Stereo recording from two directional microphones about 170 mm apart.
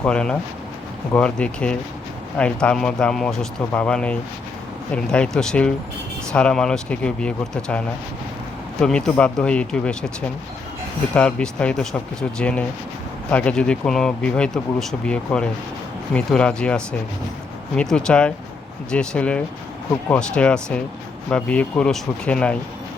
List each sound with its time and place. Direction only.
0.0 s speech: 5° left (ahead or behind)
8.8 s speech: 5° left (ahead or behind)